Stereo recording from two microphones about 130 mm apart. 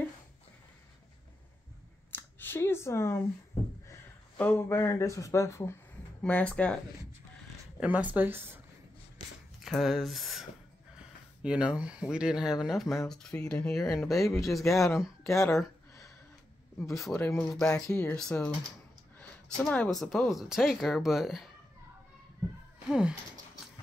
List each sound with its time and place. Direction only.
2.1 s a sound: 15° left (ahead or behind)
4.4 s speech: 15° left (ahead or behind)
6.2 s speech: 10° left (ahead or behind)
7.8 s speech: 10° right (ahead or behind)
9.7 s speech: centre (ahead or behind)
11.4 s speech: 10° right (ahead or behind)
16.8 s speech: centre (ahead or behind)
22.8 s speech: 5° right (ahead or behind)